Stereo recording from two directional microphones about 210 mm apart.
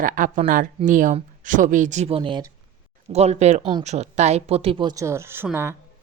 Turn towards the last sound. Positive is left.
turn(degrees=-10)  # may be behind; listen again after turning